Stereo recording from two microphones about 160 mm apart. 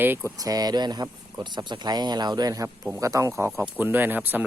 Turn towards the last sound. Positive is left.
turn(degrees=-10)  # may be behind; listen again after turning